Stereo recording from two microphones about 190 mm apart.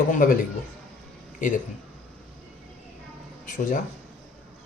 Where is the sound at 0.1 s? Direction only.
45° left (ahead or behind).